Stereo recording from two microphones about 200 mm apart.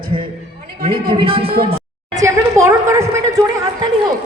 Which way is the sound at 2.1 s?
15° right (ahead or behind).